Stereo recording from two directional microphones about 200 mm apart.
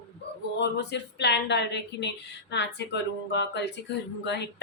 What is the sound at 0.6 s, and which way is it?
Speech, 60° left (ahead or behind).